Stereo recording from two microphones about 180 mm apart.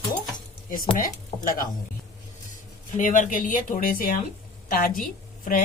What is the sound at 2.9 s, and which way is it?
A woman's voice, 45° left (ahead or behind).